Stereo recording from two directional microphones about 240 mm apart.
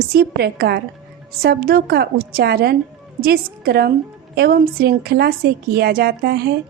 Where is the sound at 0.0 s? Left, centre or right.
Right.